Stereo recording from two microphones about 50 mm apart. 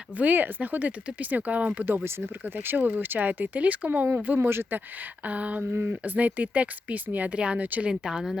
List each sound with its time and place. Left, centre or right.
0.2 s speech: right
2.4 s speech: right
4.4 s speech: right
5.2 s speech: right
5.7 s speech: right
7.6 s speech: right
7.9 s speech: centre